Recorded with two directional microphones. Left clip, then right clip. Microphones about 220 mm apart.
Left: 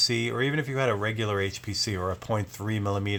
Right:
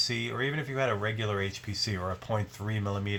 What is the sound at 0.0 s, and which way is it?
Speech, 45° left (ahead or behind).